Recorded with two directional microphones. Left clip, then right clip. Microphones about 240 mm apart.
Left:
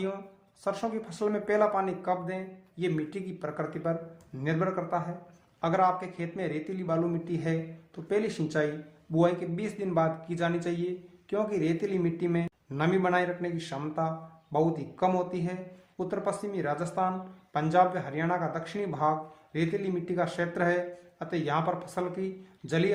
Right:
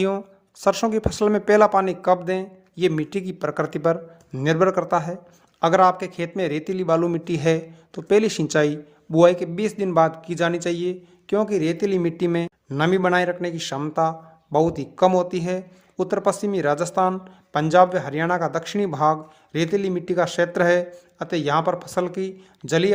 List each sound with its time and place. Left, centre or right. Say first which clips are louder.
0.6 s a man's voice: right 12 dB; right